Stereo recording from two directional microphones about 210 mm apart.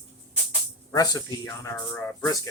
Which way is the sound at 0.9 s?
20° left (ahead or behind).